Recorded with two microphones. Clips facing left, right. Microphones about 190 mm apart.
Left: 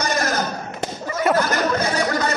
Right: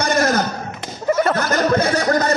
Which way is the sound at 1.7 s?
45° right (ahead or behind).